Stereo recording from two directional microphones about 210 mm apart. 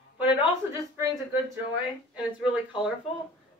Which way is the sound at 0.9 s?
10° right (ahead or behind).